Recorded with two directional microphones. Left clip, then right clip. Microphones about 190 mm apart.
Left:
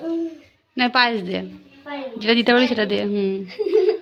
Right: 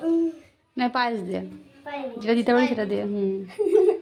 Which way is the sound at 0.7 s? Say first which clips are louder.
Left 6 dB; 5° left (ahead or behind).